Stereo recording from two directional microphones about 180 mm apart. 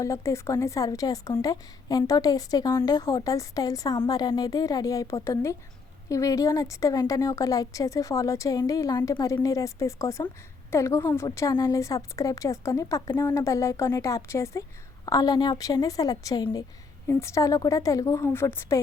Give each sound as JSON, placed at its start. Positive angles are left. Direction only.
{"t": 0.0, "sound": "a woman's voice", "side_deg": 15}